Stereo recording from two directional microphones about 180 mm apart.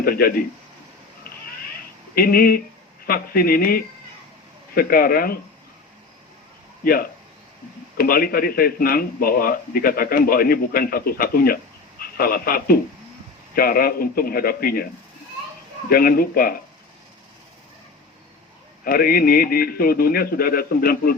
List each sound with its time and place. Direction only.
0.0 s a man's voice: 55° left (ahead or behind)
2.1 s a man's voice: 55° left (ahead or behind)
6.8 s a man's voice: 55° left (ahead or behind)
15.9 s a man's voice: 55° left (ahead or behind)
18.9 s a man's voice: 55° left (ahead or behind)